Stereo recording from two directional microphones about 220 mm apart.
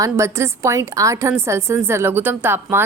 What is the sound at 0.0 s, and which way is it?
A woman's voice, 15° right (ahead or behind).